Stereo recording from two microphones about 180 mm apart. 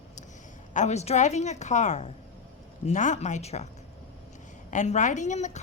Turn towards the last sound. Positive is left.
turn(degrees=40)  # may be behind; listen again after turning